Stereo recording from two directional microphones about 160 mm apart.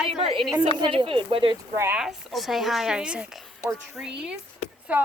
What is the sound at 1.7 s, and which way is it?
Speech, 15° right (ahead or behind).